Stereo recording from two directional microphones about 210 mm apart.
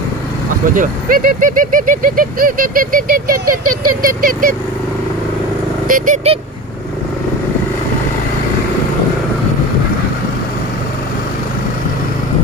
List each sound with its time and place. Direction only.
0.7 s speech: 40° right (ahead or behind)
3.4 s a sound: 90° right
4.0 s speech: 40° right (ahead or behind)
5.9 s speech: 40° right (ahead or behind)